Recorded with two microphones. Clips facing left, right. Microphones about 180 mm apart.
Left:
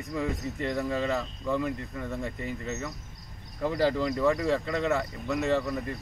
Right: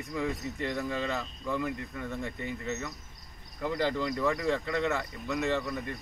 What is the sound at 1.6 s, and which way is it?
Speech, 30° left (ahead or behind).